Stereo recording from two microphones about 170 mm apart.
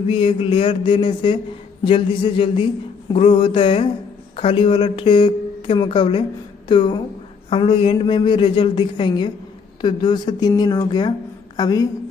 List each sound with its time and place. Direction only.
0.1 s a man's voice: 30° left (ahead or behind)